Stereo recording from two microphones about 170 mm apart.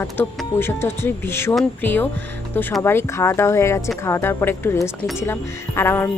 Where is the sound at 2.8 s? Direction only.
15° left (ahead or behind).